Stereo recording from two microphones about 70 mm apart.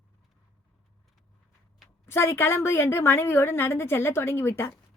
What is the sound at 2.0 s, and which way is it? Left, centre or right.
A woman's voice, left.